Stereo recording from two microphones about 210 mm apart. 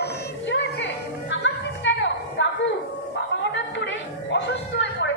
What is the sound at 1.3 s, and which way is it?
Music, 60° left (ahead or behind).